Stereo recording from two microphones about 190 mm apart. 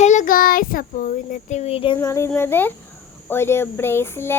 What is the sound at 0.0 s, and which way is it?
Child singing, 40° left (ahead or behind).